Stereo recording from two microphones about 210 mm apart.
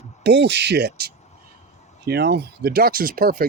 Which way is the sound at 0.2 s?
55° right (ahead or behind).